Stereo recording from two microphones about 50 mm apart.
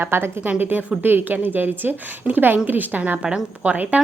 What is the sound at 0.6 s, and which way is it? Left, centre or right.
A woman's voice, right.